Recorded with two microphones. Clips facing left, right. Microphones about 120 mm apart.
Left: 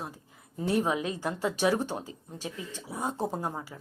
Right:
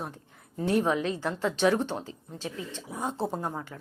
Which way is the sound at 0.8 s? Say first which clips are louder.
Right 2 dB; 15° left (ahead or behind).